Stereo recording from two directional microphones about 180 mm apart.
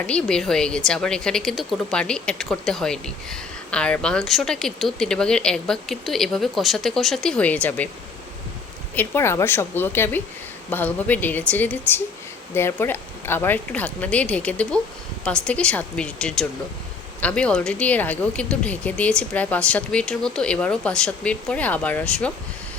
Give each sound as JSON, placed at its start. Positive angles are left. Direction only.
{"t": 0.0, "sound": "a woman's voice", "side_deg": 5}
{"t": 9.0, "sound": "a woman's voice", "side_deg": 15}